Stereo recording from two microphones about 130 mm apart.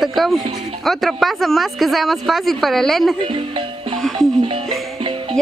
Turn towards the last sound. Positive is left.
turn(degrees=-45)  # may be behind; listen again after turning